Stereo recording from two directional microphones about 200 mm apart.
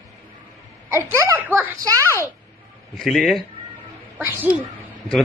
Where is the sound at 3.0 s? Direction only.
Centre (ahead or behind).